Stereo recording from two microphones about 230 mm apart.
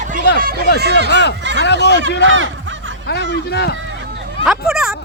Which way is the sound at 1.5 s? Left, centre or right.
Left.